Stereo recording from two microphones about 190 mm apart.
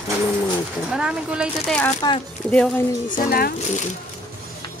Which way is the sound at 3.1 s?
45° left (ahead or behind).